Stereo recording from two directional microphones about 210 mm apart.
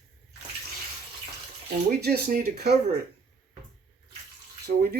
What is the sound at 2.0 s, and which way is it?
Speech, 45° right (ahead or behind).